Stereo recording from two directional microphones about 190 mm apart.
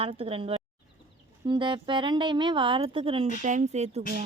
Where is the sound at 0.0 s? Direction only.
30° right (ahead or behind).